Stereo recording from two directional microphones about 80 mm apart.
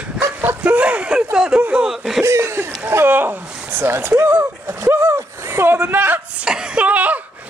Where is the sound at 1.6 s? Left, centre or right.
Centre.